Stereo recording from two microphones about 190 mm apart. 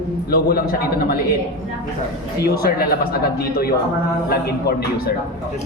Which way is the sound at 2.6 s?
55° left (ahead or behind).